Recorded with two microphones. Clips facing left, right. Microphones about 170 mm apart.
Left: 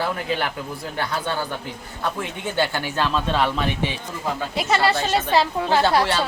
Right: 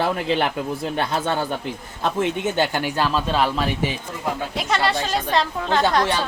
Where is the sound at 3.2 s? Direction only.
Centre (ahead or behind).